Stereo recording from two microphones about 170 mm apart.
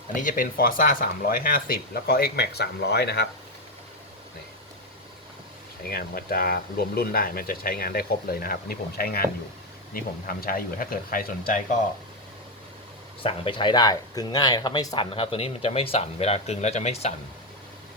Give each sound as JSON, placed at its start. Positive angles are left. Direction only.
{"t": 0.2, "sound": "speech", "side_deg": 55}
{"t": 5.9, "sound": "speech", "side_deg": 60}
{"t": 13.2, "sound": "speech", "side_deg": 30}